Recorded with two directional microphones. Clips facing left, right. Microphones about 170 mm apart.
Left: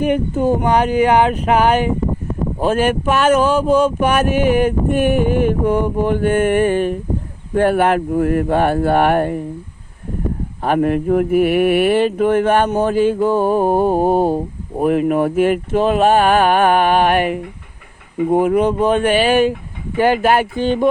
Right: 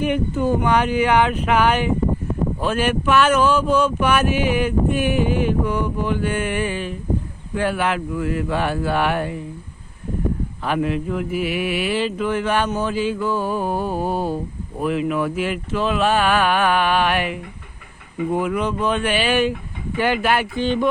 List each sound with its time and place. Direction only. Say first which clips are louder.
0.0 s speech: left 4 dB; 45° left (ahead or behind)
10.6 s speech: left 7 dB; 50° left (ahead or behind)